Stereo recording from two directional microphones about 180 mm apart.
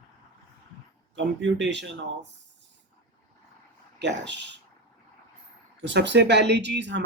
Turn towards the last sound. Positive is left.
turn(degrees=-75)  # may be behind; listen again after turning